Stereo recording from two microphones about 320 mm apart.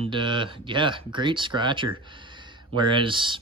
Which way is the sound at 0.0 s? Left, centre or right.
Centre.